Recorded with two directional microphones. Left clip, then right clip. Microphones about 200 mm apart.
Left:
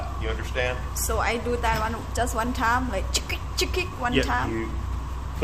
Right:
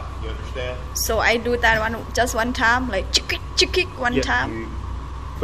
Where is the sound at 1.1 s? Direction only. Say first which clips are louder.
Right 7 dB; 15° right (ahead or behind).